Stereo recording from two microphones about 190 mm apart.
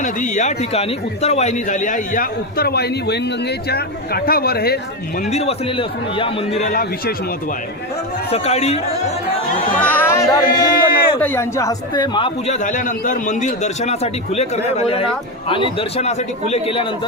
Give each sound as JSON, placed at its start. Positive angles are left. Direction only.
{"t": 0.0, "sound": "a man's voice", "side_deg": 40}
{"t": 5.3, "sound": "a man's voice", "side_deg": 35}
{"t": 8.3, "sound": "a man's voice", "side_deg": 35}
{"t": 9.8, "sound": "music", "side_deg": 10}
{"t": 11.2, "sound": "a woman's voice", "side_deg": 10}
{"t": 12.5, "sound": "a man's voice", "side_deg": 40}